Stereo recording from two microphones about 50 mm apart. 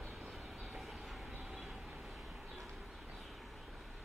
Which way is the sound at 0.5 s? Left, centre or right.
Centre.